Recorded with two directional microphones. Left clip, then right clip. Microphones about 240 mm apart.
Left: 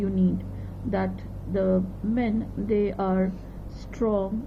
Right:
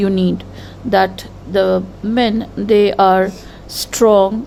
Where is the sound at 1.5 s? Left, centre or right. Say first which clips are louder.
Right 11 dB; right.